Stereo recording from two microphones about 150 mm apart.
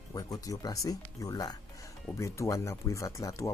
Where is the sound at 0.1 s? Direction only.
25° left (ahead or behind).